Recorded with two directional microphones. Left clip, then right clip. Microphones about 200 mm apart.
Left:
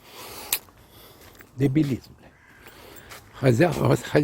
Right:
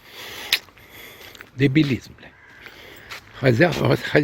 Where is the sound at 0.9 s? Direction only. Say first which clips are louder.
Right 11 dB; 20° right (ahead or behind).